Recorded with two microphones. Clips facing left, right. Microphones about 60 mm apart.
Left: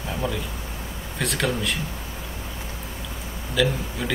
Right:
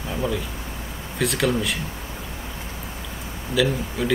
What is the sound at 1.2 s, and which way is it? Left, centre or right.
Speech, centre.